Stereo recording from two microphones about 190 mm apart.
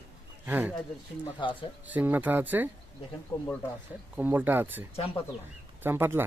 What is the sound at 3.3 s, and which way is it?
Speech, 15° left (ahead or behind).